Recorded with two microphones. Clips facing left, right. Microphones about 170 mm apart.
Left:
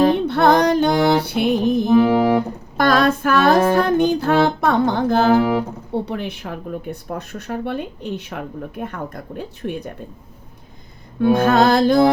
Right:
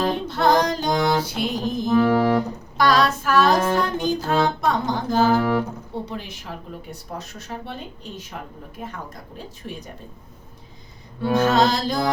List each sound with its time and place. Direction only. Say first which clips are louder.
0.3 s music: left 4 dB; 60° left (ahead or behind)
1.9 s music: left 2 dB; 15° left (ahead or behind)
2.7 s female singing: left 3 dB; 50° left (ahead or behind)
3.7 s music: left 6 dB; 55° left (ahead or behind)
5.4 s speech: left 3 dB; 15° left (ahead or behind)
6.1 s speech: left 7 dB; 60° left (ahead or behind)
11.2 s speech: left 4 dB; 55° left (ahead or behind)